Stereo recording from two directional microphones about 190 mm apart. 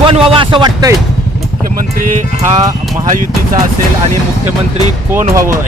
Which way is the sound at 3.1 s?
45° right (ahead or behind).